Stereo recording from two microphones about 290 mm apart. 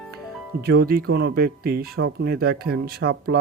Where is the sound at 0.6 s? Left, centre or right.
Right.